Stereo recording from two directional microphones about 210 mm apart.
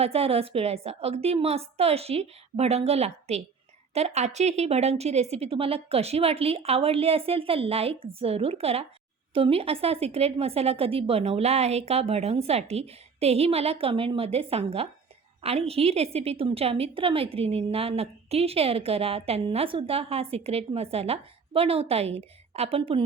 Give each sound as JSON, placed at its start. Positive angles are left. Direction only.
{"t": 0.0, "sound": "a woman's voice", "side_deg": -30}